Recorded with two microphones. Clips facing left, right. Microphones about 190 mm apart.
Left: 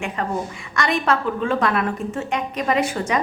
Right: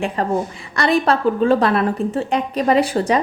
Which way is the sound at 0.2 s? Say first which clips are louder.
Right 5 dB; 35° right (ahead or behind).